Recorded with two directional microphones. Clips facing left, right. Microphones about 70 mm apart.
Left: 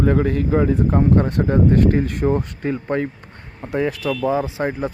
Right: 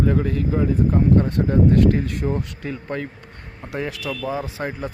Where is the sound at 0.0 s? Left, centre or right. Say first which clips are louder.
Left 3 dB; left.